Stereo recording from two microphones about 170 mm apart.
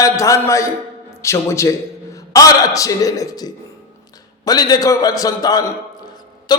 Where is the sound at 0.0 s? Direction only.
20° left (ahead or behind).